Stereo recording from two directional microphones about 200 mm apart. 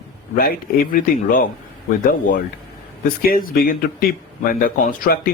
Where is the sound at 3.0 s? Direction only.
45° left (ahead or behind).